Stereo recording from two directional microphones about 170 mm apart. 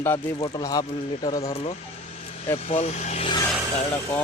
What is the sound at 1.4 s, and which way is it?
Speech, 35° left (ahead or behind).